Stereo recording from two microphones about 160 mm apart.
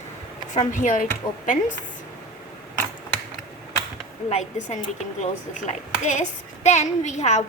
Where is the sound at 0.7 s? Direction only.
55° left (ahead or behind).